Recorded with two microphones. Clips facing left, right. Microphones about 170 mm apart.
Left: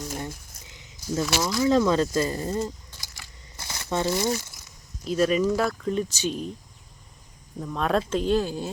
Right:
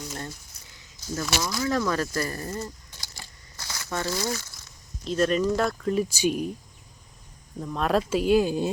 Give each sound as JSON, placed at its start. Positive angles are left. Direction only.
{"t": 0.7, "sound": "speech", "side_deg": 20}
{"t": 3.6, "sound": "crumpling", "side_deg": 25}
{"t": 5.0, "sound": "speech", "side_deg": 5}
{"t": 7.6, "sound": "speech", "side_deg": 0}